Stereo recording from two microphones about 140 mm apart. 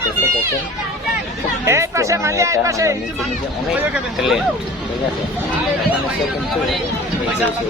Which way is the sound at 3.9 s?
5° right (ahead or behind).